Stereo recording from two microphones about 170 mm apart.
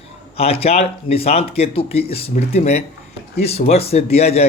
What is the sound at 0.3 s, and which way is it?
Speech, 35° left (ahead or behind).